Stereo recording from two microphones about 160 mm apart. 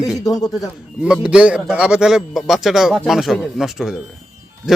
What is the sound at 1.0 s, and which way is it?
Speech, 5° right (ahead or behind).